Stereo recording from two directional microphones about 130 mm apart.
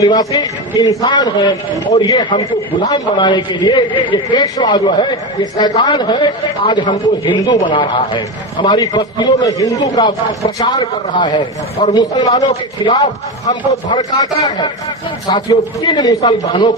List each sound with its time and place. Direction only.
0.0 s a man's voice: 30° left (ahead or behind)
10.0 s speech: 45° left (ahead or behind)
10.6 s a man's voice: 30° left (ahead or behind)
15.3 s a man's voice: 35° left (ahead or behind)